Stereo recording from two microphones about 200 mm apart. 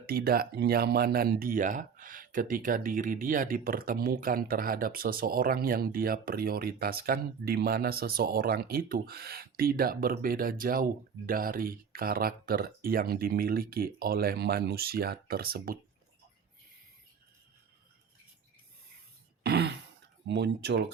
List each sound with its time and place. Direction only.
0.0 s speech: 50° right (ahead or behind)
19.4 s throat clearing: 55° right (ahead or behind)
20.2 s speech: 60° right (ahead or behind)